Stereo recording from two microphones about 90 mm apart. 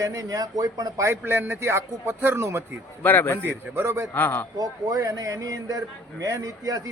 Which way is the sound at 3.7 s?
30° right (ahead or behind).